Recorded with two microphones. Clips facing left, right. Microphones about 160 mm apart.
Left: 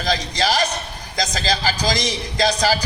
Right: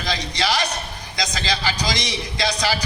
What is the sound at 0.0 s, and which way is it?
A man's voice, 40° left (ahead or behind).